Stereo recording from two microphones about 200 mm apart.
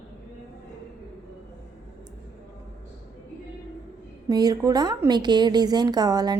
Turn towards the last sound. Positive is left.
turn(degrees=-20)  # may be behind; listen again after turning